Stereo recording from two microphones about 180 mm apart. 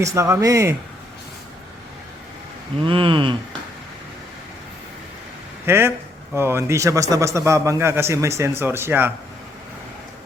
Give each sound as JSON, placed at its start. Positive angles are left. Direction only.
{"t": 0.0, "sound": "a man's voice", "side_deg": -15}
{"t": 2.8, "sound": "speech", "side_deg": -30}
{"t": 5.6, "sound": "a man's voice", "side_deg": -15}